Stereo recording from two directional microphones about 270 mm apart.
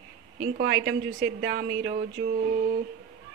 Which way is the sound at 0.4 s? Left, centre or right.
Right.